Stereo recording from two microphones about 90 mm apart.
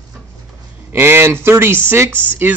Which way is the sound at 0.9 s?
25° right (ahead or behind).